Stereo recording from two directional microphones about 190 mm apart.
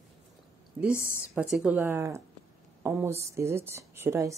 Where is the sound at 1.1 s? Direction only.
10° right (ahead or behind).